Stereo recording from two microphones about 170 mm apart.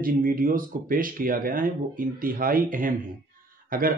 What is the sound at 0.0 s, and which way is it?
Speech, 55° right (ahead or behind).